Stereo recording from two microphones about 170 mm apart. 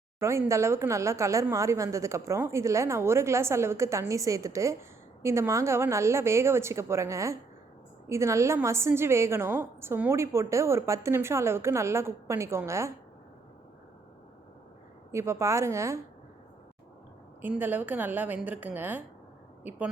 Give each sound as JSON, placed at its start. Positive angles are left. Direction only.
{"t": 0.2, "sound": "a woman's voice", "side_deg": -15}
{"t": 15.1, "sound": "a woman's voice", "side_deg": -15}
{"t": 17.4, "sound": "a woman's voice", "side_deg": -10}